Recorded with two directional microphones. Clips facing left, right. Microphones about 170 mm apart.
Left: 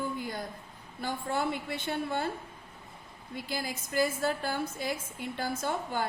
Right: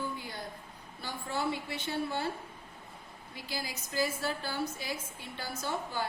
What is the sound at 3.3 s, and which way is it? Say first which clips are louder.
A woman's voice: left 4 dB; 50° left (ahead or behind).